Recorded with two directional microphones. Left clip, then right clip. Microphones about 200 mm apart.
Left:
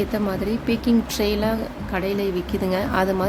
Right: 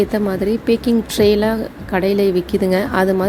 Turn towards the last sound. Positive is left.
turn(degrees=-20)  # may be behind; listen again after turning